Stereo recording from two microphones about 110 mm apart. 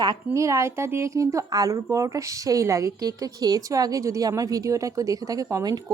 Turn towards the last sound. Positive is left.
turn(degrees=-30)  # may be behind; listen again after turning